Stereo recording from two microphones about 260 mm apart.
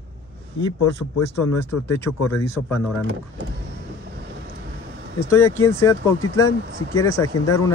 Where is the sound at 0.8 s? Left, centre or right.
Left.